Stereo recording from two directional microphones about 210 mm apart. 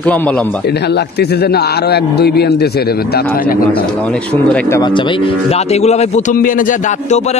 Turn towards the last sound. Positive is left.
turn(degrees=40)  # may be behind; listen again after turning